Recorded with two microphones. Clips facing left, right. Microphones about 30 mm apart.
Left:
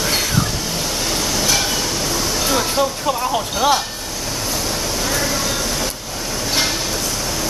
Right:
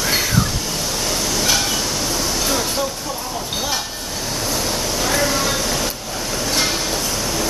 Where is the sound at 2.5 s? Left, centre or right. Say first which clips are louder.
Left 6 dB; centre.